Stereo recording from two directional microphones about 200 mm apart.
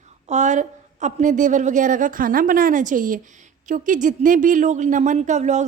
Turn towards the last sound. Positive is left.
turn(degrees=-35)  # may be behind; listen again after turning